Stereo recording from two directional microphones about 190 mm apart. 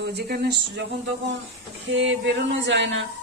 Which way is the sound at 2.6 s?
70° right (ahead or behind).